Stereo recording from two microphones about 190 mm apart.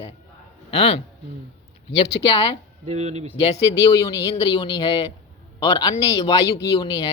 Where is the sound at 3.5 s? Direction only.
15° left (ahead or behind).